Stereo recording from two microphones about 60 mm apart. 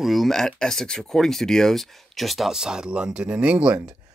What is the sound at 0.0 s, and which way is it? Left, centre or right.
Speech, centre.